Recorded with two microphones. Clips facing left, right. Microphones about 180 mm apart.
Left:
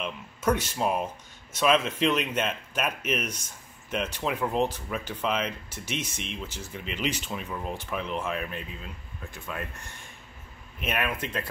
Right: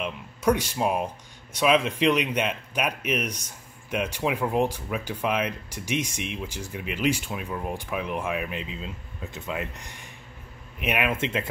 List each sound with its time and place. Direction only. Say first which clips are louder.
0.0 s speech: right 3 dB; 10° right (ahead or behind)